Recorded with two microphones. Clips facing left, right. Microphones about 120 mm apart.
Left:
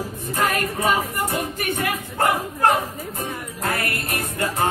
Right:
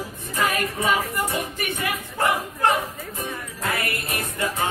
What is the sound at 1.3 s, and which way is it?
Speech, 40° left (ahead or behind).